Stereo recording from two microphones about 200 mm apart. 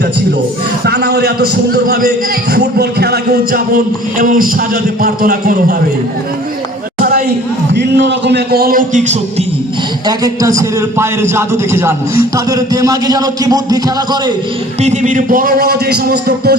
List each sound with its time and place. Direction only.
0.9 s a man's voice: 55° right (ahead or behind)
7.7 s a man's voice: 60° right (ahead or behind); by 9.1 s 40° right (ahead or behind)
10.1 s a man's voice: 15° right (ahead or behind)
14.8 s a man's voice: 35° right (ahead or behind)